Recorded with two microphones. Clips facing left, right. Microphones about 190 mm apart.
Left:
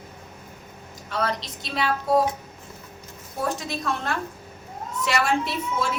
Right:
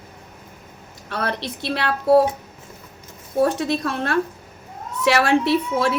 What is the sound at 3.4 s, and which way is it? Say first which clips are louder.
A woman's voice: right 9 dB; 65° right (ahead or behind).